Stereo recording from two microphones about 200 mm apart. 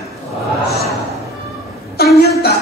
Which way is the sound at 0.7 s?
Centre (ahead or behind).